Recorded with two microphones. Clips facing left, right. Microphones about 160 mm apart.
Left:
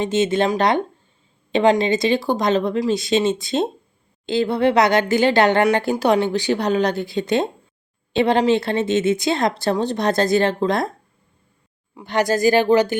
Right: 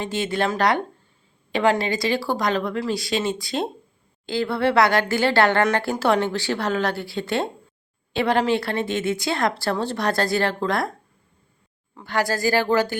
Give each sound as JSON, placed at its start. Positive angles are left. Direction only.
{"t": 0.0, "sound": "speech", "side_deg": 20}
{"t": 11.9, "sound": "speech", "side_deg": 20}